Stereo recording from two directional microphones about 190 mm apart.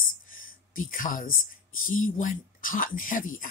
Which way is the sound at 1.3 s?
90° left.